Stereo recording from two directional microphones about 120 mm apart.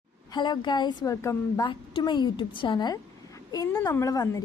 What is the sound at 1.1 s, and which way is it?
Speech, 25° left (ahead or behind).